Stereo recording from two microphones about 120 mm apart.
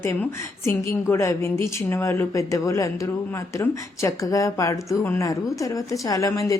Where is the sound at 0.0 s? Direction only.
20° left (ahead or behind).